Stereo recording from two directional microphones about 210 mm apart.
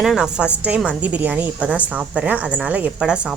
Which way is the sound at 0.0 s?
5° right (ahead or behind).